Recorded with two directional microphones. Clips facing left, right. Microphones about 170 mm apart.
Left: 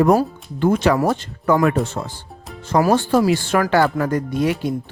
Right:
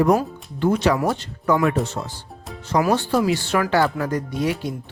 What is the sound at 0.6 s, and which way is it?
Speech, 50° left (ahead or behind).